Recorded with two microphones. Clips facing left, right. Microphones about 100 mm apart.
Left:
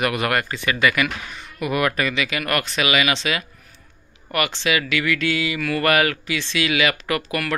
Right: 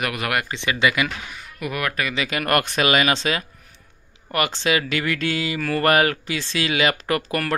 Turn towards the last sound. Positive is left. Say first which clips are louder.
# right 1 dB
turn(degrees=-40)  # may be behind; listen again after turning